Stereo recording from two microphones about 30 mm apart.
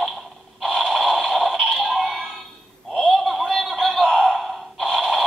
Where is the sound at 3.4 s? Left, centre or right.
Centre.